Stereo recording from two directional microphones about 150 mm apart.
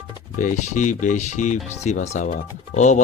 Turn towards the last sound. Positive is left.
turn(degrees=55)  # may be behind; listen again after turning